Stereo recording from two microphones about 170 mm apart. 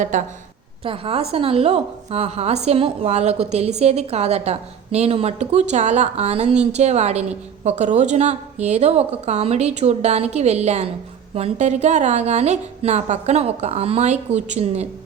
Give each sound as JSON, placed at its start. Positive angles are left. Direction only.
{"t": 0.1, "sound": "a woman's voice", "side_deg": -50}
{"t": 0.9, "sound": "a woman's voice", "side_deg": -35}